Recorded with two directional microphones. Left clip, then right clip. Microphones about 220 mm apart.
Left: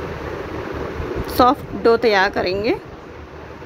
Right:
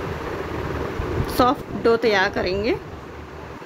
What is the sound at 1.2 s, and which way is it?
Speech, centre (ahead or behind).